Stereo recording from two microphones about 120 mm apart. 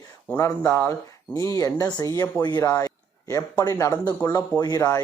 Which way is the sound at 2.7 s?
25° left (ahead or behind).